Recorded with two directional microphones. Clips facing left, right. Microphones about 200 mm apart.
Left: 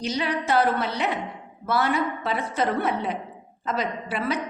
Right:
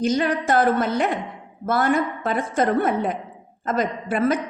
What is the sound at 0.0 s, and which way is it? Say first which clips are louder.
A woman's voice: right 6 dB; 50° right (ahead or behind).